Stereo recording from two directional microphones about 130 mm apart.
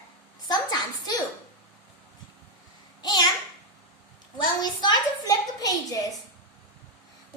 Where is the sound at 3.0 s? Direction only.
30° left (ahead or behind).